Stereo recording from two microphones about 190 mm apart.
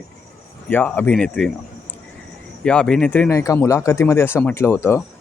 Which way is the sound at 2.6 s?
5° left (ahead or behind).